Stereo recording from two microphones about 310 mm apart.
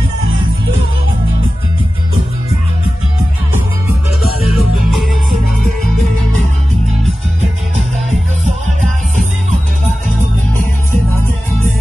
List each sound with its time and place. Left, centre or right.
4.5 s music: right